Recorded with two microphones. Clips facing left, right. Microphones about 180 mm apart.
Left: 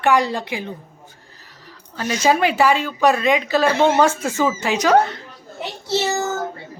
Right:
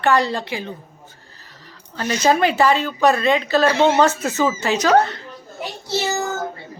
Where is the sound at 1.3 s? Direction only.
10° left (ahead or behind).